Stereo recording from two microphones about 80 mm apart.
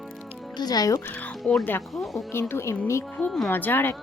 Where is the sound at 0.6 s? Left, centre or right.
Left.